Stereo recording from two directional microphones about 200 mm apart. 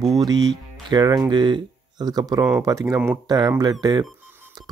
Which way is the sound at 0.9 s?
20° right (ahead or behind).